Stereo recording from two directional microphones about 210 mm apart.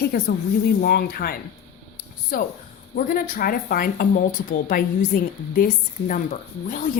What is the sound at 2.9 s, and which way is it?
A woman's voice, 40° left (ahead or behind).